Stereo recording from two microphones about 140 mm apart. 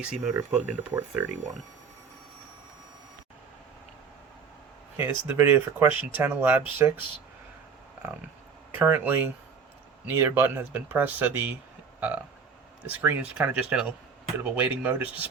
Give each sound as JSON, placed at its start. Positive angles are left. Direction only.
{"t": 0.0, "sound": "speech", "side_deg": -5}
{"t": 4.9, "sound": "speech", "side_deg": -15}
{"t": 8.8, "sound": "speech", "side_deg": -15}
{"t": 11.9, "sound": "burping", "side_deg": -10}
{"t": 12.8, "sound": "speech", "side_deg": -15}